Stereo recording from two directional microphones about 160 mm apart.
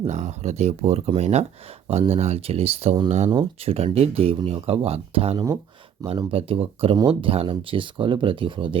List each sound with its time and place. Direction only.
0.1 s speech: 45° right (ahead or behind)